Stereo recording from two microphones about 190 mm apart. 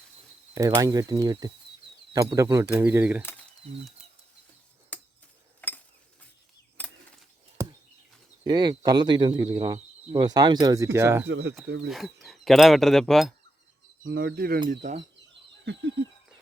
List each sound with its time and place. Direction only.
0.5 s speech: 20° right (ahead or behind)
4.9 s a sound: 10° left (ahead or behind)
7.6 s a sound: 15° right (ahead or behind)
8.4 s speech: 20° right (ahead or behind)
11.3 s speech: 60° right (ahead or behind)
11.9 s speech: centre (ahead or behind)
14.0 s speech: 65° right (ahead or behind)
14.7 s speech: 40° right (ahead or behind)
15.6 s a sound: 65° right (ahead or behind)